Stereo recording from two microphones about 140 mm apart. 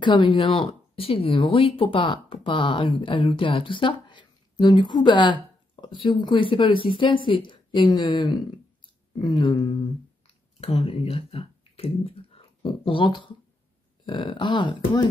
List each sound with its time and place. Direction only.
0.0 s speech: 35° left (ahead or behind)